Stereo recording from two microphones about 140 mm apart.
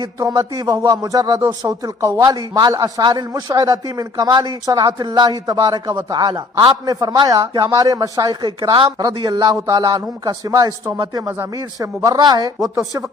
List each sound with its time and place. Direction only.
0.0 s a man's voice: 25° right (ahead or behind)